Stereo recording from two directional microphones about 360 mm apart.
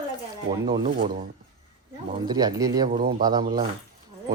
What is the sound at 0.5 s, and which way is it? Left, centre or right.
Speech, centre.